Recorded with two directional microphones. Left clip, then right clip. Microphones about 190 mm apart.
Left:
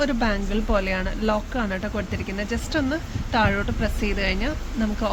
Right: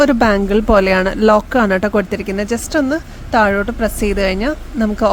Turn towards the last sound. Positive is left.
turn(degrees=-50)  # may be behind; listen again after turning